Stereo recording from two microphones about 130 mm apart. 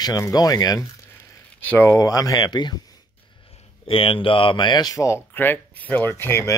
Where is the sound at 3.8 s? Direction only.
45° left (ahead or behind); by 6.5 s 20° left (ahead or behind).